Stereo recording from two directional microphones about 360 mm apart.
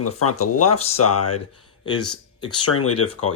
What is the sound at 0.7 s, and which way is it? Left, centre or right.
Speech, centre.